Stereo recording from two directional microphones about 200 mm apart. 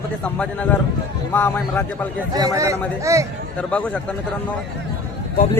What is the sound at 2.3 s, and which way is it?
Speech, 15° right (ahead or behind).